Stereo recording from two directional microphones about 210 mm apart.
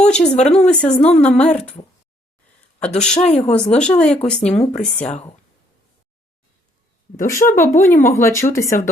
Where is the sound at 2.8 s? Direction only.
5° left (ahead or behind).